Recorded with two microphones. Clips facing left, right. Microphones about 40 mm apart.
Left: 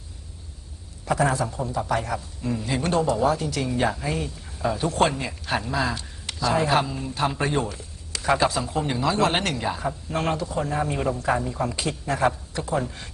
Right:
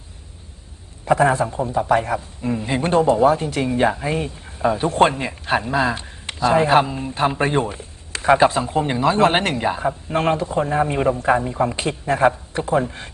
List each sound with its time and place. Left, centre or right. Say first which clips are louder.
1.0 s a man's voice: right 6 dB; right